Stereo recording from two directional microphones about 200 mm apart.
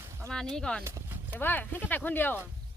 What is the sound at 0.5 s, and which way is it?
Speech, 5° left (ahead or behind).